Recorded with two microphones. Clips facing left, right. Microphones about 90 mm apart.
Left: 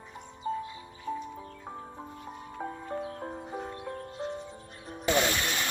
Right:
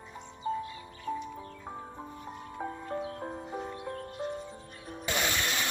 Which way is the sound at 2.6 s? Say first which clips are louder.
Even; centre (ahead or behind).